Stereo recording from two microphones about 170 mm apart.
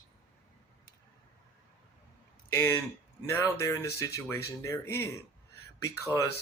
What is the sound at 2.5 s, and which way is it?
Speech, 15° left (ahead or behind).